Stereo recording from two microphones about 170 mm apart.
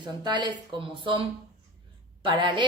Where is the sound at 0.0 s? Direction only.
25° right (ahead or behind).